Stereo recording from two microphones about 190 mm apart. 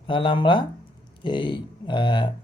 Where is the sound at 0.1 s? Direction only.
25° left (ahead or behind).